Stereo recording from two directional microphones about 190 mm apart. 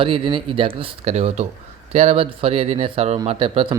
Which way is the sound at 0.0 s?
25° right (ahead or behind).